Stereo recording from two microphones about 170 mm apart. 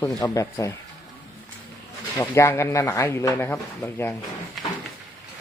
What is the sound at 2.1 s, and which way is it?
Speech, 15° left (ahead or behind).